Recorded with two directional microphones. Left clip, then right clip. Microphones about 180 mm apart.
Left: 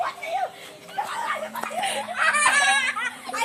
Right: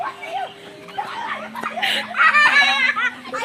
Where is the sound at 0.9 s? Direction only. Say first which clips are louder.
Right 1 dB; centre (ahead or behind).